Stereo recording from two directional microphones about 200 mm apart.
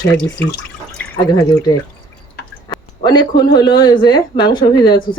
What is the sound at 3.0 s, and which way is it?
Speech, 20° left (ahead or behind).